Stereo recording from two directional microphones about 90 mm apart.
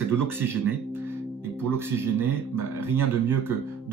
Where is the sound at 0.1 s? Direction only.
25° right (ahead or behind).